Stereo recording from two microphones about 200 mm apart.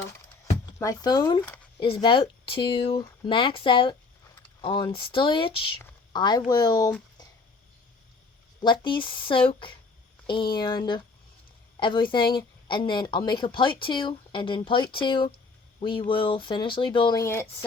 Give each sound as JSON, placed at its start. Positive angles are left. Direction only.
{"t": 0.8, "sound": "speech", "side_deg": 20}
{"t": 8.6, "sound": "speech", "side_deg": 25}